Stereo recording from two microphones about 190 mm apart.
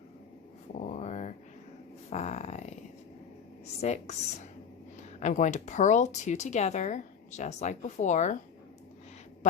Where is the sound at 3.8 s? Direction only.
35° left (ahead or behind).